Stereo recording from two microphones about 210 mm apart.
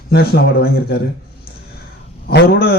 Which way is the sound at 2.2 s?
50° left (ahead or behind).